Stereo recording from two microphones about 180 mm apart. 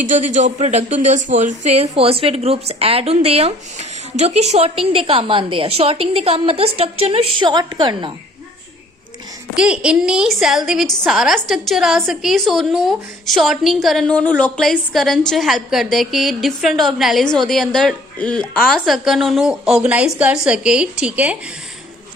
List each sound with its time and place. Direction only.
0.0 s a woman's voice: 45° right (ahead or behind); by 8.1 s 25° right (ahead or behind)
9.6 s a woman's voice: 5° right (ahead or behind)